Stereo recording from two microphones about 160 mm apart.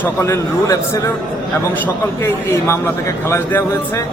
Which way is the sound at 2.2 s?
15° left (ahead or behind).